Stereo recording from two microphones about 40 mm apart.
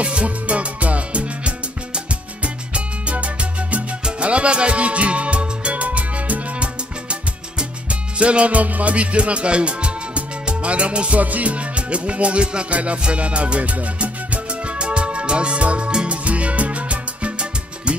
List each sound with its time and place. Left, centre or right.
0.0 s music: right
16.1 s salsa music: right